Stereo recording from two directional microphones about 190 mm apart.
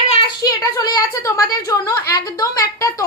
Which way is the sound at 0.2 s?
20° left (ahead or behind).